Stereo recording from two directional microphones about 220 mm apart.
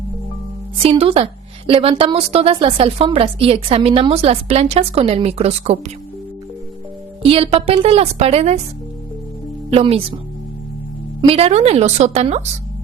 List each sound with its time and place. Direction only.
0.9 s a woman's voice: 25° right (ahead or behind)
7.2 s a woman's voice: 25° right (ahead or behind)
9.7 s a woman's voice: 25° right (ahead or behind)
11.2 s a woman's voice: 25° right (ahead or behind)